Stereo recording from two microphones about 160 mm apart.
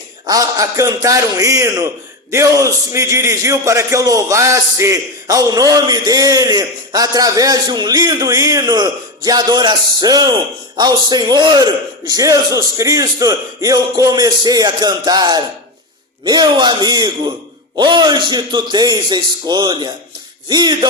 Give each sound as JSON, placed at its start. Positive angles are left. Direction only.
{"t": 0.3, "sound": "a man's voice", "side_deg": -20}